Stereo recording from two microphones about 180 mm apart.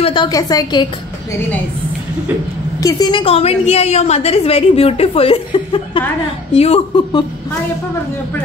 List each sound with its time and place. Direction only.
0.0 s a woman's voice: 25° left (ahead or behind)
2.8 s a woman's voice: 20° left (ahead or behind)